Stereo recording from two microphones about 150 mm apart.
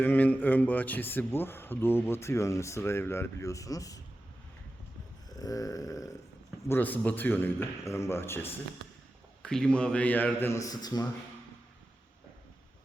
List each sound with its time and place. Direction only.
0.0 s a man's voice: 10° left (ahead or behind)
5.3 s a sound: 25° left (ahead or behind)
6.7 s a man's voice: 10° left (ahead or behind)